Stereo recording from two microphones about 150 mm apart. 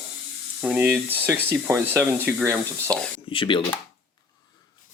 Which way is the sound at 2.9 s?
5° left (ahead or behind).